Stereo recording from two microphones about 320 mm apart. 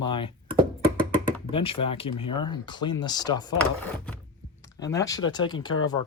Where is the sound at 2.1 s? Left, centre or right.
Left.